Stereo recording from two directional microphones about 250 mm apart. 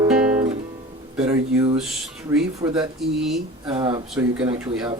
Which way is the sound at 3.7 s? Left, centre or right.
Centre.